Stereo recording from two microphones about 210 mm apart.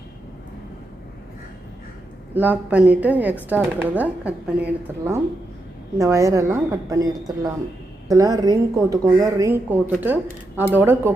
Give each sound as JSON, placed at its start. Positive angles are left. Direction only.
{"t": 2.3, "sound": "speech", "side_deg": -10}